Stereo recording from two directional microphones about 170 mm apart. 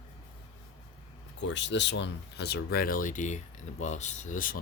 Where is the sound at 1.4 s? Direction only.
90° left.